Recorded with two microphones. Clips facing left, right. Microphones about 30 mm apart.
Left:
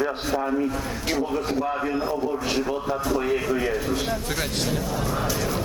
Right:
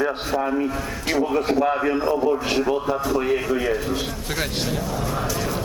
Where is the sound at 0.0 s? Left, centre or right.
Centre.